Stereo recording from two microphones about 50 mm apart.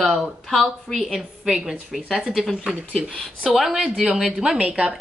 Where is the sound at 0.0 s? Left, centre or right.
Centre.